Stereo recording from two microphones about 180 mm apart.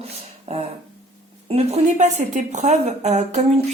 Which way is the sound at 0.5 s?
35° right (ahead or behind).